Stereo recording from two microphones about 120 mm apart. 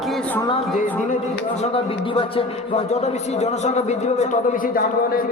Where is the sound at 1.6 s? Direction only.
55° left (ahead or behind).